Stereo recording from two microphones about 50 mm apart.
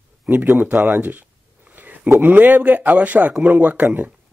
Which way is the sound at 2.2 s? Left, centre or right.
Right.